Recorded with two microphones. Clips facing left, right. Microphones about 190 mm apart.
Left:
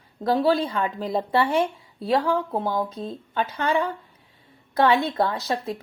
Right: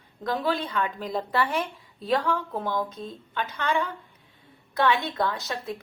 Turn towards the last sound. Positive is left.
turn(degrees=35)  # may be behind; listen again after turning